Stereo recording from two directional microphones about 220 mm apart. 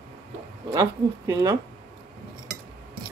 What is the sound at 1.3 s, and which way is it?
Speech, 15° right (ahead or behind).